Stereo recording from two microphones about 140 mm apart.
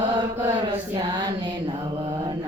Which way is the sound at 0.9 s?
30° right (ahead or behind).